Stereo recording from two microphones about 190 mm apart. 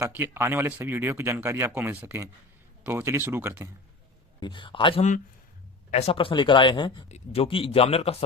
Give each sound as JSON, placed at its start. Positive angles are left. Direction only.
{"t": 0.0, "sound": "speech", "side_deg": -10}
{"t": 4.4, "sound": "speech", "side_deg": 25}